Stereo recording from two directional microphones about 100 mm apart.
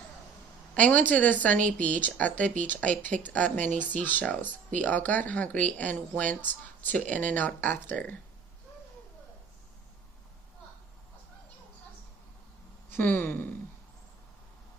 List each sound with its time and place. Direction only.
0.7 s a woman's voice: 15° left (ahead or behind)
12.9 s speech: 20° left (ahead or behind)